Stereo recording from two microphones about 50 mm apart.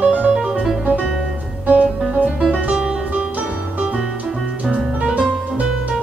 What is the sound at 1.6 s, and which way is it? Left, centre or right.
Music, right.